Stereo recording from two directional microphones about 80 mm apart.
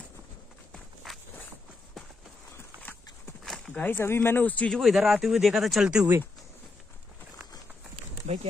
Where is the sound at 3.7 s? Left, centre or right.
Left.